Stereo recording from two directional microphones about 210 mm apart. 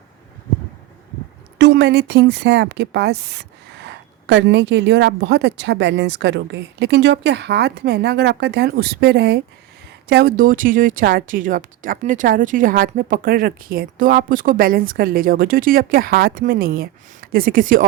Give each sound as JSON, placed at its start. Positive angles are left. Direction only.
{"t": 1.5, "sound": "speech", "side_deg": -55}